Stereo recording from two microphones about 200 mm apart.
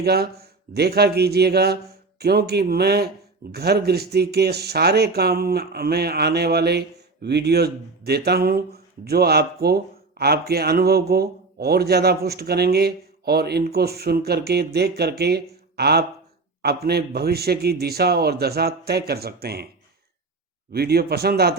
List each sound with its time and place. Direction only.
0.0 s speech: 50° right (ahead or behind)
20.7 s speech: 50° right (ahead or behind)